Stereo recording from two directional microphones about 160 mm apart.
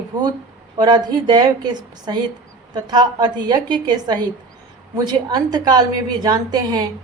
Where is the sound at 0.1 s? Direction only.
25° right (ahead or behind).